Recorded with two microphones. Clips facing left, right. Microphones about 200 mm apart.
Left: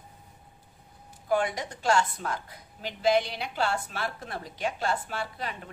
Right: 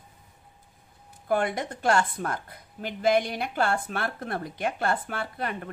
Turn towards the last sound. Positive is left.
turn(degrees=-55)  # may be behind; listen again after turning